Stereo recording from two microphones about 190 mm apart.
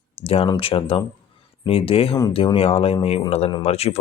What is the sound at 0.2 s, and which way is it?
Speech, 30° left (ahead or behind).